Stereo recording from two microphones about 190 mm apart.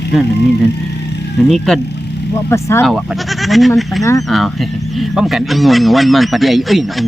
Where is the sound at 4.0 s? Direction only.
15° left (ahead or behind).